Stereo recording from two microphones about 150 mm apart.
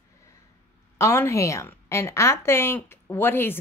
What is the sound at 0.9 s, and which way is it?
Speech, 20° left (ahead or behind).